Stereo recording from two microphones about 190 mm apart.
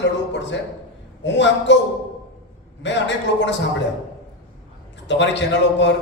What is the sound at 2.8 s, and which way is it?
Speech, 70° left (ahead or behind).